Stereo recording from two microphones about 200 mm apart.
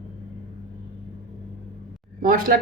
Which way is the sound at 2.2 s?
45° right (ahead or behind).